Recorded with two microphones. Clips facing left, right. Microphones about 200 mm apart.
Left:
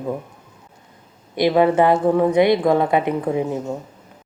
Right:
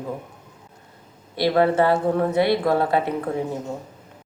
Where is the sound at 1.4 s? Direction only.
15° left (ahead or behind).